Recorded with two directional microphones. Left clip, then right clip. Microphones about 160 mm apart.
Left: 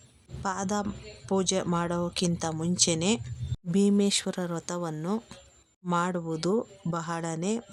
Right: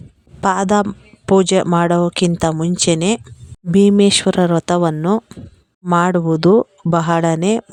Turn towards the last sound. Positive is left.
turn(degrees=-60)  # may be behind; listen again after turning